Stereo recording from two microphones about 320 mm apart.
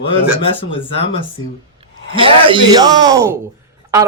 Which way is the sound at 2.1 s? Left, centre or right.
Centre.